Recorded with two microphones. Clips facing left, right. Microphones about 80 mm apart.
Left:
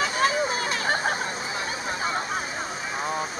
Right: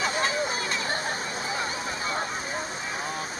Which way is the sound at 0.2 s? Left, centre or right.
Left.